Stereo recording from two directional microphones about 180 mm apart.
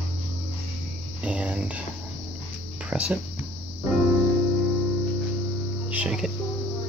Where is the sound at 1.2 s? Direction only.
5° right (ahead or behind).